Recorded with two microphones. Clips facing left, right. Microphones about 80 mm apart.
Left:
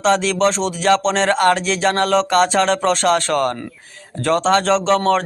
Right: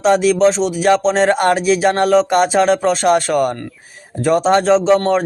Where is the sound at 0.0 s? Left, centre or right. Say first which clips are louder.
Right 4 dB; centre.